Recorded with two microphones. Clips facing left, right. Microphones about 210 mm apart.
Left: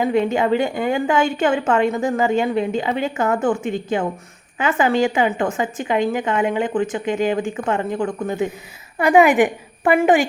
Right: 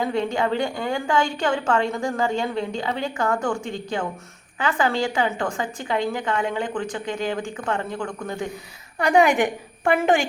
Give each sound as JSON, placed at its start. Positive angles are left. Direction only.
{"t": 0.0, "sound": "a woman's voice", "side_deg": 20}
{"t": 9.1, "sound": "a woman's voice", "side_deg": 5}